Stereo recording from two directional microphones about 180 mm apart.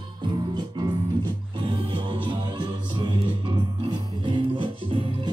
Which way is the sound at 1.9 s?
30° right (ahead or behind).